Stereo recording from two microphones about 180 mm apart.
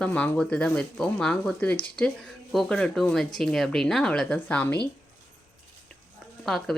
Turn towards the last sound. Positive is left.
turn(degrees=0)  # may be behind; listen again after turning